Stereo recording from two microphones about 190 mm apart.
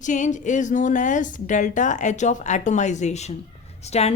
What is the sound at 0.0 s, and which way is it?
A woman's voice, 40° left (ahead or behind).